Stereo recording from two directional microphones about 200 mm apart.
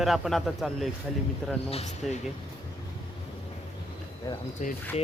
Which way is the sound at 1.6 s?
30° left (ahead or behind).